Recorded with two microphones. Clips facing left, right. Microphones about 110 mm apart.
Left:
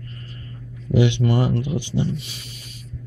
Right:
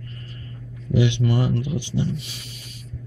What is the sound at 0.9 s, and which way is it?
Speech, 50° left (ahead or behind).